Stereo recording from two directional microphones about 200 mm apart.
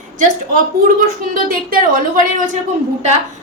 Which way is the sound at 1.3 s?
45° right (ahead or behind).